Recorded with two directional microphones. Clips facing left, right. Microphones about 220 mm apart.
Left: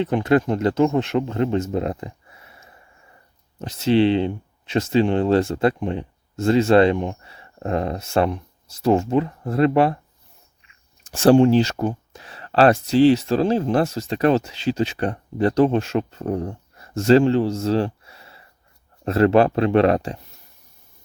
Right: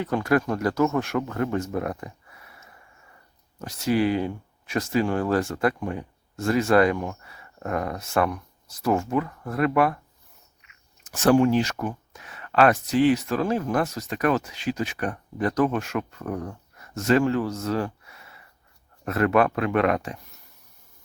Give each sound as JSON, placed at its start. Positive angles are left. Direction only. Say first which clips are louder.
{"t": 0.0, "sound": "speech", "louder": "left 4 dB", "side_deg": 25}